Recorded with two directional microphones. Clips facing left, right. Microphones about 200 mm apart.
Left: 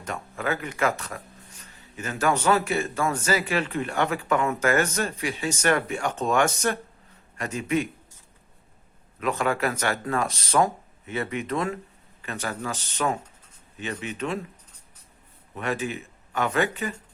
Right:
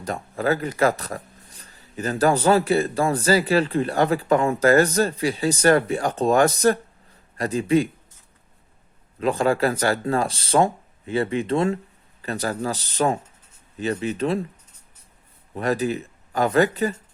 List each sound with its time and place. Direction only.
0.0 s speech: 35° right (ahead or behind)
9.2 s speech: 30° right (ahead or behind)
15.5 s speech: 35° right (ahead or behind)